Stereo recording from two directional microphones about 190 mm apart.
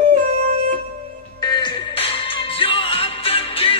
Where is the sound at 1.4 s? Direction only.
20° left (ahead or behind).